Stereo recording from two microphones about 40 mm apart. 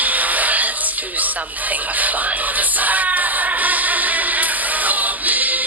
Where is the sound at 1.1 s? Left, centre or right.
Right.